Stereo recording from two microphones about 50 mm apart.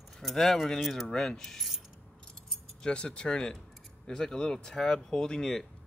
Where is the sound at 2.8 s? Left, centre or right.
Centre.